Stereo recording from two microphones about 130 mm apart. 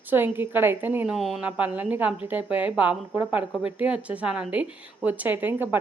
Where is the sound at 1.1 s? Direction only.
Centre (ahead or behind).